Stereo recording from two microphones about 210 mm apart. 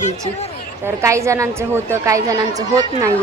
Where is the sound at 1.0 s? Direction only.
15° right (ahead or behind).